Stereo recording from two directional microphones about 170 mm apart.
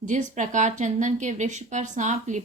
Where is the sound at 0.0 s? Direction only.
50° right (ahead or behind).